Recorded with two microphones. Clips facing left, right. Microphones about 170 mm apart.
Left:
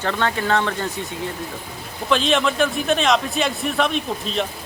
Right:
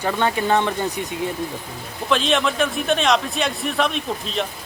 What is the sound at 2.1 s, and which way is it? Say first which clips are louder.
Speech: left 1 dB; centre (ahead or behind).